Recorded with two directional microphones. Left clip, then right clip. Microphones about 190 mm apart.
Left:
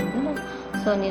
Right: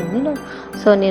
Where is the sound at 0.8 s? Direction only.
40° right (ahead or behind).